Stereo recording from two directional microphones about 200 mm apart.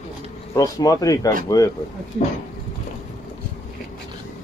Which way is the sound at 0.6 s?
20° left (ahead or behind).